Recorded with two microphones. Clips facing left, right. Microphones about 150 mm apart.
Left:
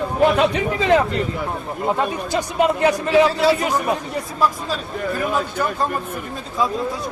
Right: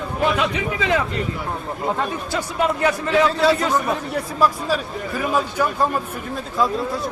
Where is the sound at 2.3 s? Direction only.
20° left (ahead or behind).